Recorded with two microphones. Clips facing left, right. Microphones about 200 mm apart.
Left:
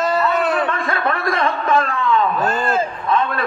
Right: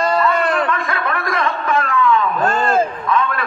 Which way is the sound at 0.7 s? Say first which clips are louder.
Even; 30° left (ahead or behind).